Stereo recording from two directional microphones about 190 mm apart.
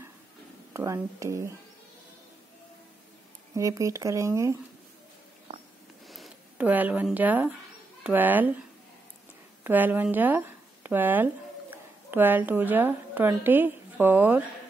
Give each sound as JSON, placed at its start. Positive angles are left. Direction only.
{"t": 0.7, "sound": "speech", "side_deg": -15}
{"t": 3.5, "sound": "speech", "side_deg": -15}
{"t": 6.0, "sound": "speech", "side_deg": 0}
{"t": 9.6, "sound": "a woman's voice", "side_deg": -10}